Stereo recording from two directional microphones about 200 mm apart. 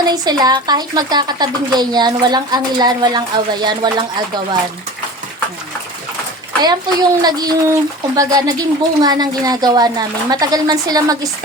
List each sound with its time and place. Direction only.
0.0 s speech: 20° right (ahead or behind)
6.6 s speech: 20° right (ahead or behind)